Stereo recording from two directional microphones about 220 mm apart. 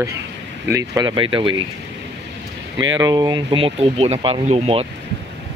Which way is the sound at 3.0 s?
20° right (ahead or behind).